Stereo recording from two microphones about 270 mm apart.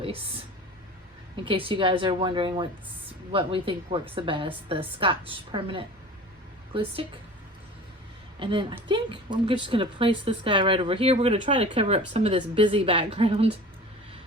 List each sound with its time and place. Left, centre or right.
1.5 s a woman's voice: centre
8.4 s a woman's voice: centre